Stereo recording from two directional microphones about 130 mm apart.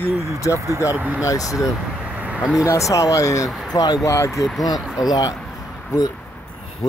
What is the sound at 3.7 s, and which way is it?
Speech, 30° left (ahead or behind).